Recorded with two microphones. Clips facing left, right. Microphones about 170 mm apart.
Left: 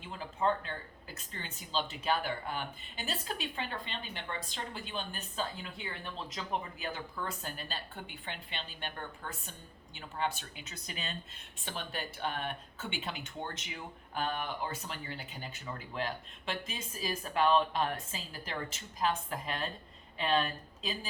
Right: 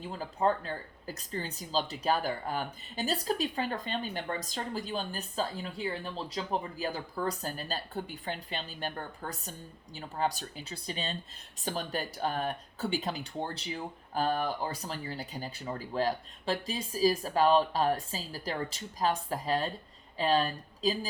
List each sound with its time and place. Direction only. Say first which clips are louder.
0.0 s a woman's voice: right 3 dB; 40° right (ahead or behind)